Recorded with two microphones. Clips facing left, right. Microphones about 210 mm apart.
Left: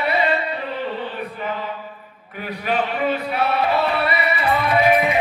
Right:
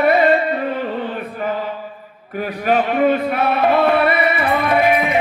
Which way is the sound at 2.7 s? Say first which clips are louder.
Right 6 dB; 45° right (ahead or behind).